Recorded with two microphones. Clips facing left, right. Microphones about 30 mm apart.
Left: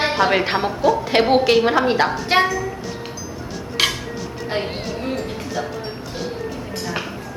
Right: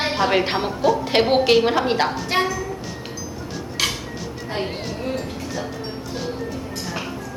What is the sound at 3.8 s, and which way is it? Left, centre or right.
Dishes, left.